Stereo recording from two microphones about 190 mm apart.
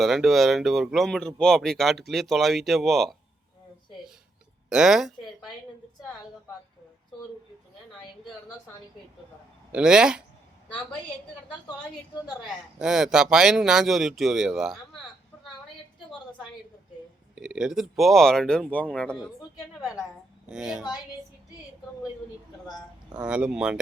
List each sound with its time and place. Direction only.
0.0 s speech: centre (ahead or behind)
4.7 s speech: 5° right (ahead or behind)
9.7 s speech: 5° right (ahead or behind)
12.2 s speech: 5° right (ahead or behind)
17.3 s speech: 5° right (ahead or behind)
20.5 s speech: 5° right (ahead or behind)
23.1 s speech: 5° right (ahead or behind)